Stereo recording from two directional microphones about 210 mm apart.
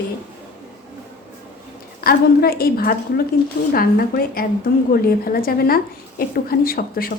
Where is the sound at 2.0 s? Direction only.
45° left (ahead or behind).